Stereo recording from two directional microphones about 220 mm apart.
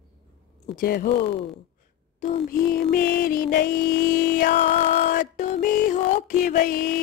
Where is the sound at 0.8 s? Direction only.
40° left (ahead or behind).